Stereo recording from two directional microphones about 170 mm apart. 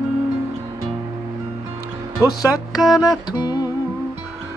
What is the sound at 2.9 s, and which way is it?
Music, 25° left (ahead or behind).